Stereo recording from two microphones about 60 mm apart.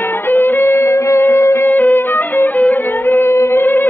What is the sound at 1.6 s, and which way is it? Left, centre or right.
Music, left.